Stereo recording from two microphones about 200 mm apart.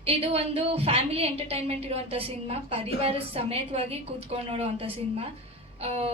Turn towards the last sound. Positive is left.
turn(degrees=-30)  # may be behind; listen again after turning